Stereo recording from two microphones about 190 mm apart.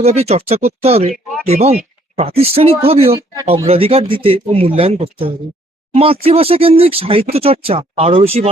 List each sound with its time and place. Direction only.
0.0 s speech: 35° right (ahead or behind)